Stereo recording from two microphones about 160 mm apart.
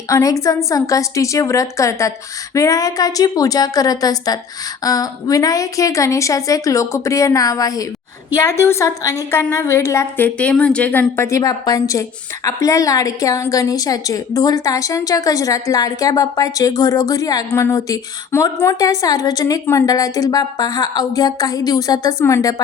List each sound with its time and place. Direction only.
0.1 s a woman's voice: 20° left (ahead or behind)